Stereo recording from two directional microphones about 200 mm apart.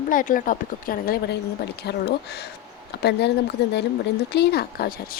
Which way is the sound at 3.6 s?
55° left (ahead or behind).